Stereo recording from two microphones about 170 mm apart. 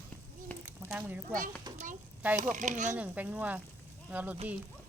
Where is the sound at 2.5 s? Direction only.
45° right (ahead or behind).